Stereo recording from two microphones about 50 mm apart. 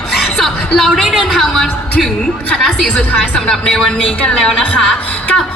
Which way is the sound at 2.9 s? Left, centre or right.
Left.